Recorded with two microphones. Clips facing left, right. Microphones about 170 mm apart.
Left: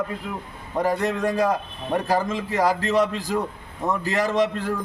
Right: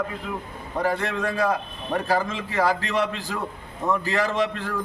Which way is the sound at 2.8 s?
40° left (ahead or behind).